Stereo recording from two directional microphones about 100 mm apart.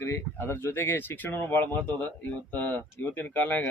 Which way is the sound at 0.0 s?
25° left (ahead or behind).